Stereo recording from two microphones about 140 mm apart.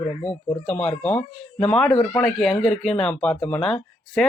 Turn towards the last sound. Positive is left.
turn(degrees=5)  # may be behind; listen again after turning